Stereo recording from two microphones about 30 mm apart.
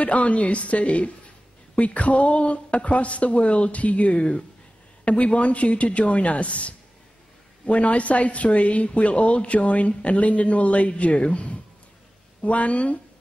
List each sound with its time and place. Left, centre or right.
0.0 s speech: left